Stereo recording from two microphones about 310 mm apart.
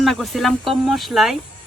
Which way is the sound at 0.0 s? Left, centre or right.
Centre.